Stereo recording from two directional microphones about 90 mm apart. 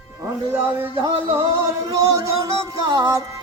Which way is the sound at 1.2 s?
35° right (ahead or behind).